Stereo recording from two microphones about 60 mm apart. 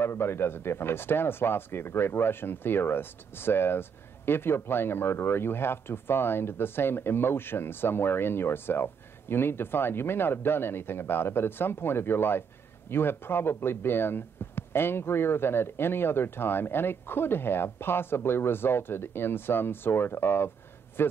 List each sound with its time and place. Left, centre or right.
0.0 s speech: left